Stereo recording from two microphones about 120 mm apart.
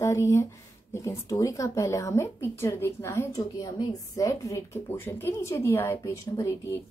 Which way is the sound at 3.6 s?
30° left (ahead or behind).